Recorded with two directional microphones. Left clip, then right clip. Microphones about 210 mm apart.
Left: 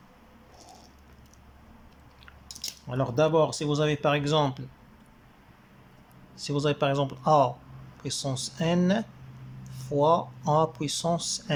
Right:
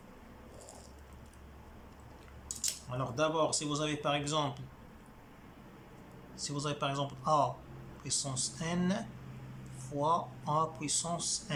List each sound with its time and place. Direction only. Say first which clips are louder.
2.9 s speech: left 9 dB; 35° left (ahead or behind)
6.3 s speech: left 10 dB; 35° left (ahead or behind)